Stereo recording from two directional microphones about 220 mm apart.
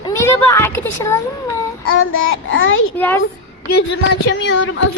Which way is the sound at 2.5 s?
60° left (ahead or behind).